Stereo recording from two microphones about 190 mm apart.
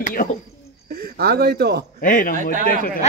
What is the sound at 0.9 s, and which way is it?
Speech, 55° right (ahead or behind).